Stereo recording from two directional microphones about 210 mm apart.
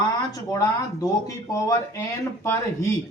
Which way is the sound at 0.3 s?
15° left (ahead or behind).